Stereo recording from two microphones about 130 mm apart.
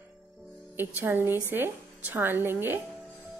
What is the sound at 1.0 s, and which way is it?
A woman's voice, 15° right (ahead or behind).